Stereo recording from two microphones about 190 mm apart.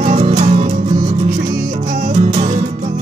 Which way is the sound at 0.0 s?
35° right (ahead or behind).